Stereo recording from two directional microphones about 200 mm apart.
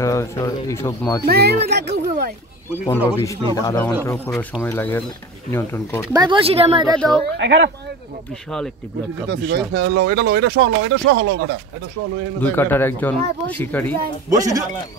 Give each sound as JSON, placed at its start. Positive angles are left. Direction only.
{"t": 0.0, "sound": "speech", "side_deg": 15}
{"t": 1.2, "sound": "speech", "side_deg": -50}
{"t": 3.5, "sound": "speech", "side_deg": 10}
{"t": 6.1, "sound": "a woman's voice", "side_deg": -25}
{"t": 7.0, "sound": "a woman's voice", "side_deg": 5}
{"t": 7.3, "sound": "speech", "side_deg": -65}
{"t": 9.3, "sound": "speech", "side_deg": -55}
{"t": 12.4, "sound": "speech", "side_deg": 10}
{"t": 14.3, "sound": "speech", "side_deg": -15}